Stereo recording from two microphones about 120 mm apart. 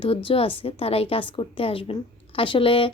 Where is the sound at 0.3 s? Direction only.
50° left (ahead or behind).